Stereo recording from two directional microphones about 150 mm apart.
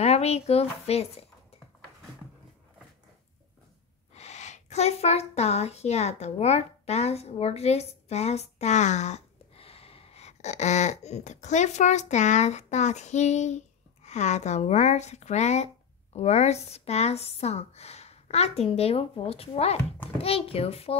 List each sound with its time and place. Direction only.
0.0 s a woman's voice: 45° left (ahead or behind)
4.1 s a woman's voice: 45° left (ahead or behind)